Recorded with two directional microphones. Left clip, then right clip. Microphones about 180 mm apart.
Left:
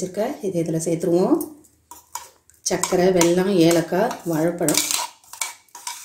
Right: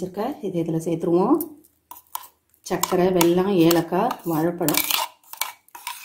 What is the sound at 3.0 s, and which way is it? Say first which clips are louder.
A woman's voice: left 2 dB; 45° right (ahead or behind).